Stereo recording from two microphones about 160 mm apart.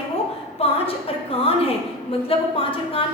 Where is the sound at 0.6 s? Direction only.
35° left (ahead or behind).